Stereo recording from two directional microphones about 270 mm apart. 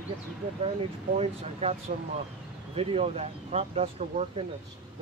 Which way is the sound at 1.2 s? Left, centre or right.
Right.